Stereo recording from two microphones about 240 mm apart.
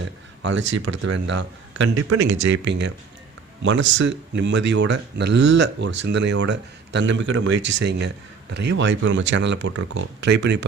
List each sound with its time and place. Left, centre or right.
0.0 s speech: right
1.8 s speech: right
2.4 s speech: right